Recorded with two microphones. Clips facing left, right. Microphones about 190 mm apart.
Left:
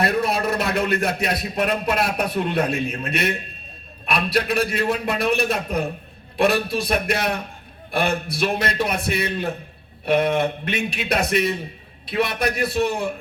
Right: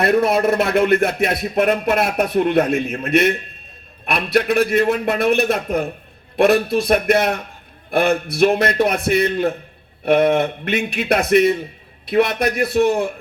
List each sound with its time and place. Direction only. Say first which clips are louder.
0.0 s a man's voice: right 6 dB; 55° right (ahead or behind)